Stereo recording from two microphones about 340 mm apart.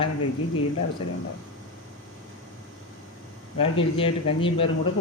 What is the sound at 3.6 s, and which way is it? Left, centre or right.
A man's voice, centre.